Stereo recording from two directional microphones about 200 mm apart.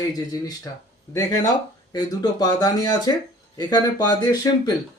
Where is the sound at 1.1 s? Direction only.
15° left (ahead or behind).